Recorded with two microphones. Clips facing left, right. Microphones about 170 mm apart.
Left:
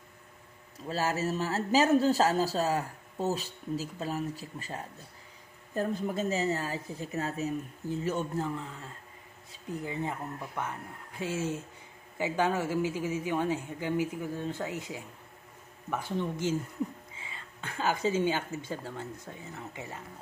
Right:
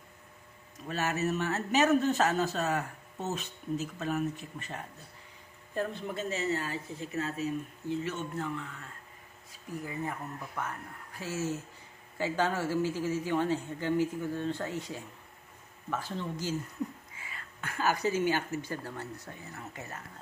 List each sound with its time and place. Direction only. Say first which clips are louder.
0.8 s speech: left 1 dB; 30° left (ahead or behind)
5.8 s a man's voice: left 3 dB; 40° left (ahead or behind); by 20.0 s 15° left (ahead or behind)